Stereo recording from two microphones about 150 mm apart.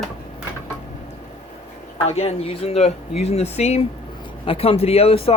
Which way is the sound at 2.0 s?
45° left (ahead or behind).